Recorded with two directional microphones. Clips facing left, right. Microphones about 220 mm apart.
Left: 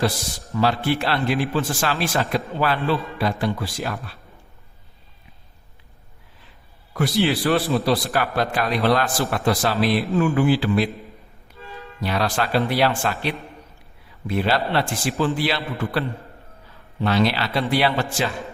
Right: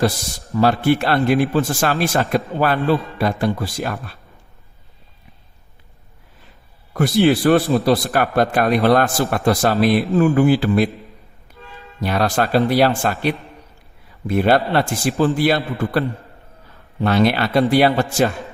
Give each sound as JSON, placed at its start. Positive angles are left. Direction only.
{"t": 0.5, "sound": "a man's voice", "side_deg": -50}
{"t": 6.9, "sound": "a man's voice", "side_deg": -50}
{"t": 11.9, "sound": "a man's voice", "side_deg": -45}